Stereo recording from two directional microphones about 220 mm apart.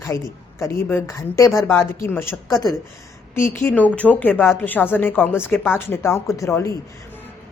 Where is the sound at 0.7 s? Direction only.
10° left (ahead or behind).